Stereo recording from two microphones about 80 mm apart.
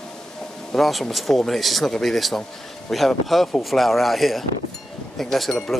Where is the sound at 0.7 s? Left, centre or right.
Centre.